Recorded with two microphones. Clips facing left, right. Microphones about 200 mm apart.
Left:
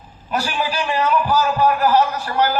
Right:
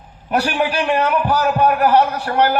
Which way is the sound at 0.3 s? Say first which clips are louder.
Right 4 dB; 65° right (ahead or behind).